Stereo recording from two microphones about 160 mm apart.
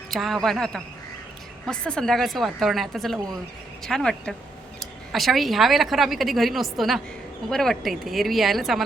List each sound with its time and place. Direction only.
0.1 s speech: centre (ahead or behind)